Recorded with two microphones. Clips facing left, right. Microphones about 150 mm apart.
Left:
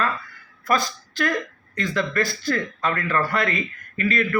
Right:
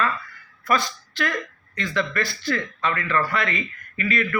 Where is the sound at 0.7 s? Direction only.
45° left (ahead or behind).